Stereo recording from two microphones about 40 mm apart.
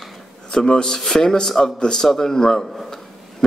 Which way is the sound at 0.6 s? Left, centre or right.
Centre.